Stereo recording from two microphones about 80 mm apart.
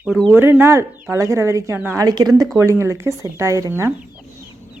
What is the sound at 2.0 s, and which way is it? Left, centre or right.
Speech, right.